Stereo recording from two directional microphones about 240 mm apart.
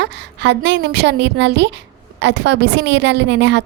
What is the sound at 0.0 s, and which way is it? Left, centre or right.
A woman's voice, right.